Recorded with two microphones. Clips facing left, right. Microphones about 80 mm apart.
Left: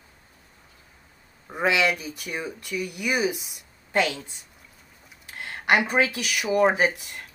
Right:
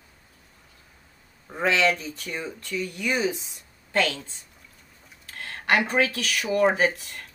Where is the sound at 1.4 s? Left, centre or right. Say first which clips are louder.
Even; centre.